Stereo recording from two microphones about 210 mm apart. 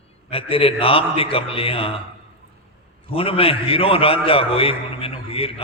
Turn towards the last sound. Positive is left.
turn(degrees=25)  # may be behind; listen again after turning